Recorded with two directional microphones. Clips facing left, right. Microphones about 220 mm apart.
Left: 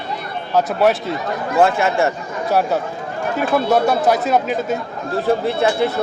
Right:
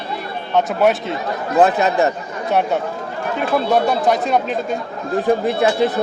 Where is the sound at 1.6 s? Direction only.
20° right (ahead or behind).